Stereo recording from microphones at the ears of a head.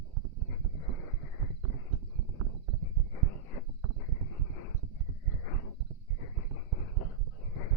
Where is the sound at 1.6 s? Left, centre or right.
Right.